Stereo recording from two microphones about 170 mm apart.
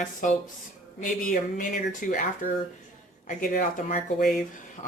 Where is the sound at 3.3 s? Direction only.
50° left (ahead or behind).